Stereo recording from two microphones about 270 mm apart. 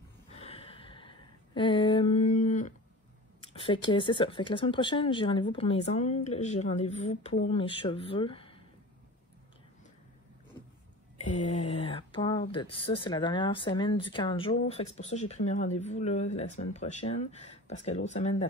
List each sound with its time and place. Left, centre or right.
0.3 s a sound: left
3.6 s speech: centre
11.3 s speech: left